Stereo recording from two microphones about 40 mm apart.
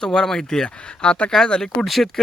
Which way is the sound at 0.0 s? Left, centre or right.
Centre.